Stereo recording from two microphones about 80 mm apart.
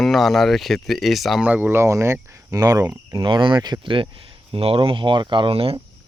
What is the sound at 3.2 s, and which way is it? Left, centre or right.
Speech, right.